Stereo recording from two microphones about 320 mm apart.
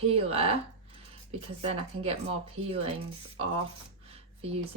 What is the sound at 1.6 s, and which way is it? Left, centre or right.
Speech, centre.